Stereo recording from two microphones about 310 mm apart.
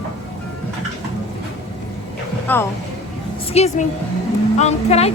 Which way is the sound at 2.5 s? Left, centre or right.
Centre.